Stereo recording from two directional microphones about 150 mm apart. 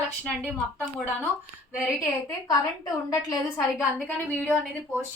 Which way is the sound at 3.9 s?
10° left (ahead or behind).